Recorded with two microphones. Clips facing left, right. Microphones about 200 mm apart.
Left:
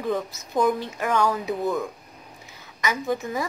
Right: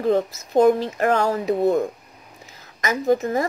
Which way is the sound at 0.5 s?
60° right (ahead or behind).